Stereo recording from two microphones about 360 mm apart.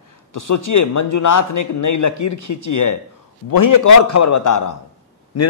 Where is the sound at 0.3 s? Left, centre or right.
Left.